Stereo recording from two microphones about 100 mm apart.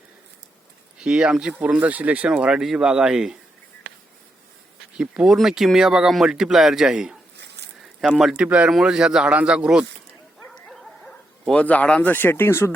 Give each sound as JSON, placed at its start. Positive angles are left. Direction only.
{"t": 0.9, "sound": "speech", "side_deg": -10}
{"t": 4.9, "sound": "speech", "side_deg": -5}
{"t": 8.2, "sound": "speech", "side_deg": -5}
{"t": 8.4, "sound": "speech", "side_deg": -15}
{"t": 10.5, "sound": "dog", "side_deg": 5}
{"t": 11.5, "sound": "speech", "side_deg": 15}